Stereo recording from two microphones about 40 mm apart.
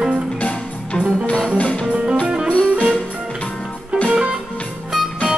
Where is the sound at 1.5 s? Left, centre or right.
Left.